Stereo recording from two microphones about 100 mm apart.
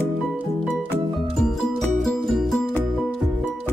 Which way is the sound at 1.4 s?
5° left (ahead or behind).